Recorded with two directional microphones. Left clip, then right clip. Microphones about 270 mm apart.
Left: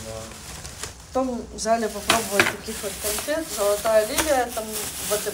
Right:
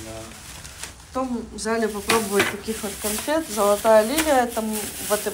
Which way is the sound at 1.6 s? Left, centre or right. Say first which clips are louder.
Left 1 dB; centre.